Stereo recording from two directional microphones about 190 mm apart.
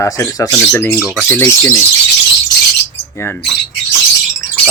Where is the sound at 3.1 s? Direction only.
10° left (ahead or behind).